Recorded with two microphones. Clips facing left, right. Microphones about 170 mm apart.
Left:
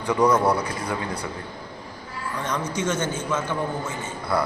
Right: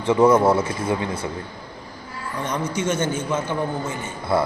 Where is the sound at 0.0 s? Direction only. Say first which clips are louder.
Right 4 dB; 25° right (ahead or behind).